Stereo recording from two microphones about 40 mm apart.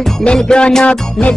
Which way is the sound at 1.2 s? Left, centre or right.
Centre.